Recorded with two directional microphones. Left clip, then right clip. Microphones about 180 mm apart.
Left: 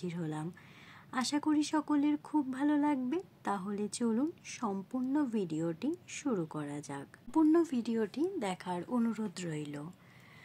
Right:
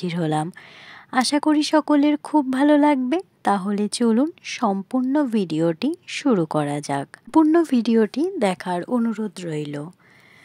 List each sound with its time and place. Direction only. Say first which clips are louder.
0.0 s speech: right 17 dB; 50° right (ahead or behind)
8.9 s speech: right 11 dB; 30° right (ahead or behind)